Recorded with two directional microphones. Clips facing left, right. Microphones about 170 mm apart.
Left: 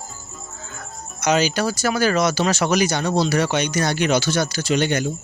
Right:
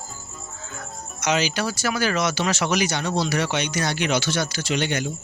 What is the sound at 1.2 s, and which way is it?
Speech, 40° left (ahead or behind).